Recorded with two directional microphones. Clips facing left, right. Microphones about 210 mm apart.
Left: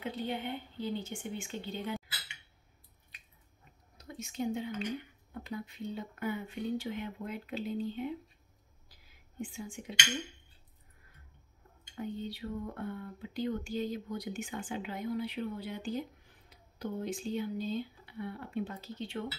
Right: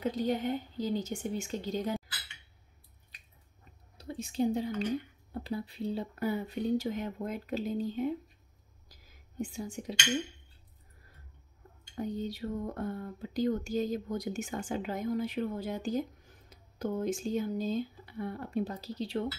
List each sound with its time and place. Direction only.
0.0 s speech: 40° right (ahead or behind)
4.0 s a woman's voice: 30° right (ahead or behind)
8.8 s whispering: 45° right (ahead or behind)
11.9 s speech: 40° right (ahead or behind)